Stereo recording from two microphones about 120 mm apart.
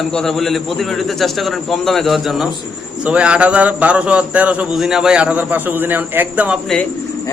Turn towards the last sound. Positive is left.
turn(degrees=-15)  # may be behind; listen again after turning